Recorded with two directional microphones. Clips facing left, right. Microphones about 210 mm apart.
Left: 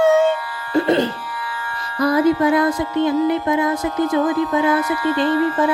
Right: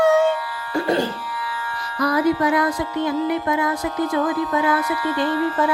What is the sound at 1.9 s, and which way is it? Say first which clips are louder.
Speech: left 3 dB; 25° left (ahead or behind).